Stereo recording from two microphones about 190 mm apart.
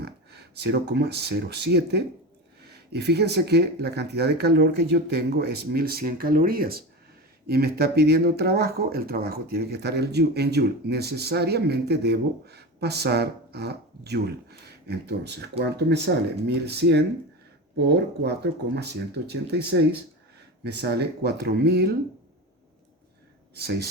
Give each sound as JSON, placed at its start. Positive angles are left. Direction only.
{"t": 0.0, "sound": "speech", "side_deg": -60}
{"t": 23.6, "sound": "speech", "side_deg": -55}